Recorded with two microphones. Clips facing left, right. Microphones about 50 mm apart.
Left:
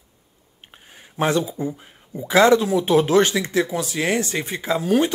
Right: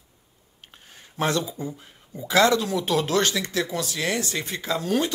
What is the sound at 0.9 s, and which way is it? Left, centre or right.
Speech, centre.